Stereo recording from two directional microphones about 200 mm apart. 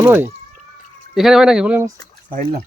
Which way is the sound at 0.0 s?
10° right (ahead or behind).